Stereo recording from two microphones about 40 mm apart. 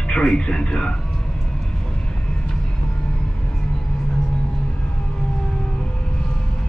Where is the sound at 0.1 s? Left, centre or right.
Left.